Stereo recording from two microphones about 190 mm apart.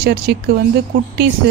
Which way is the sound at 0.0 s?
60° right (ahead or behind).